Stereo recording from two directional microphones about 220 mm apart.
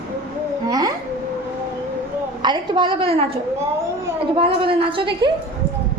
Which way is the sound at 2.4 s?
20° right (ahead or behind).